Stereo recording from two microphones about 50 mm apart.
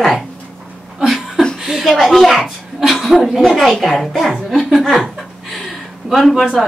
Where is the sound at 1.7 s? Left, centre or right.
Centre.